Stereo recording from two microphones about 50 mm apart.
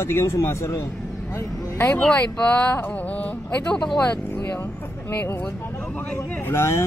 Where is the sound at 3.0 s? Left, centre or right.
Left.